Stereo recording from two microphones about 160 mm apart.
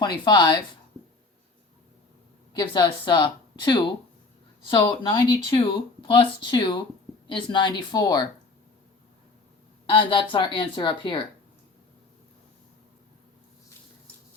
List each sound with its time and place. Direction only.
0.0 s speech: 25° left (ahead or behind)
2.6 s speech: 30° left (ahead or behind)
9.9 s speech: 30° left (ahead or behind)